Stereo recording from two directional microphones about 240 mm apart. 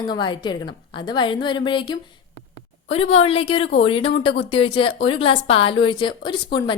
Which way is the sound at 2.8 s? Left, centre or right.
Left.